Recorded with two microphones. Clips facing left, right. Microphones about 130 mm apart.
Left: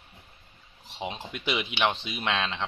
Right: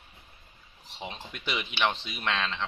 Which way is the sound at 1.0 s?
20° left (ahead or behind).